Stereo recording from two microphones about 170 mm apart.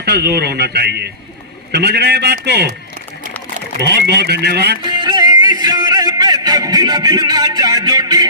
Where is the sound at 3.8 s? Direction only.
70° right (ahead or behind).